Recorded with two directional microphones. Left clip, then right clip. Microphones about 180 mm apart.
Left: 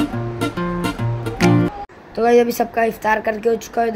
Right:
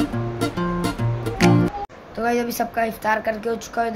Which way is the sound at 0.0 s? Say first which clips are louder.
Left 2 dB; centre (ahead or behind).